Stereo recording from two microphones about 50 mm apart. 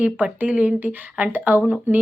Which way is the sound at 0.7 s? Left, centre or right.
Right.